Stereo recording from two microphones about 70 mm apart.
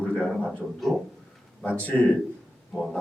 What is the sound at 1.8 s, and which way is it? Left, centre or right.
Speech, left.